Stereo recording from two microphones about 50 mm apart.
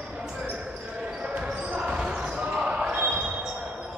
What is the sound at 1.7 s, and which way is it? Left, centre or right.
Basketball bounce, centre.